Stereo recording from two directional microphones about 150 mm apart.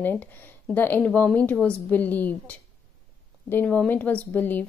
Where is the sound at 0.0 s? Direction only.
10° left (ahead or behind).